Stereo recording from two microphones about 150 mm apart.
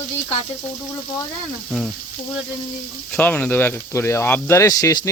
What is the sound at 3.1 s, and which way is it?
Speech, 10° left (ahead or behind).